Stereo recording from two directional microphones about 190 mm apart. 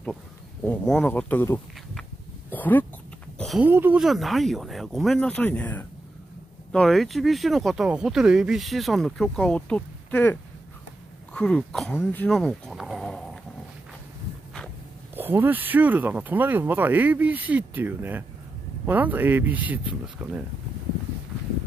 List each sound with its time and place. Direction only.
0.7 s speech: 5° left (ahead or behind)
2.5 s a sound: 10° left (ahead or behind)
3.3 s speech: centre (ahead or behind)
15.1 s speech: 10° right (ahead or behind)